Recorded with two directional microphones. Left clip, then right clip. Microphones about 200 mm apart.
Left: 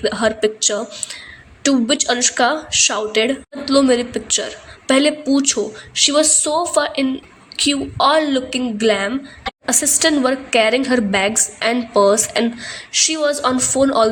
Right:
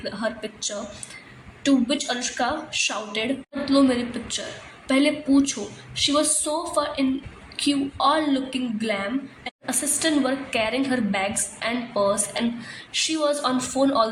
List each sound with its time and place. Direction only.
0.0 s a woman's voice: 35° left (ahead or behind)